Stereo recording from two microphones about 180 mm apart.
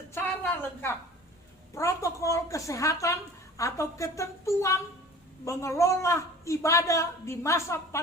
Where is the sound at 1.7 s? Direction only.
15° left (ahead or behind).